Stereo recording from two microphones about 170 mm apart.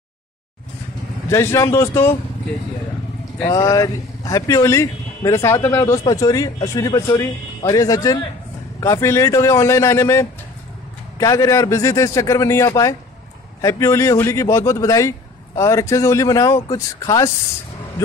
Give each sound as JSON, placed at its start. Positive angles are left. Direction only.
{"t": 1.3, "sound": "a man's voice", "side_deg": 15}
{"t": 3.4, "sound": "a man's voice", "side_deg": 20}